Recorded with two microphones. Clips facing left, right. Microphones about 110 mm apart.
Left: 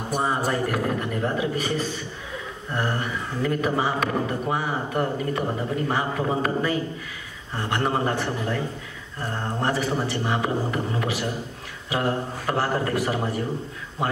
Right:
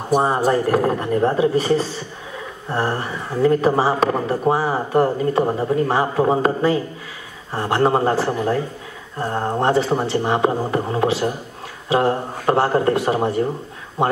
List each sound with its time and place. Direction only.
0.1 s a woman's voice: 35° right (ahead or behind)